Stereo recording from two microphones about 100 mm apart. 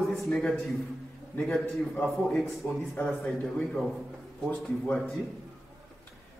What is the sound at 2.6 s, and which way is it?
Speech, 20° left (ahead or behind).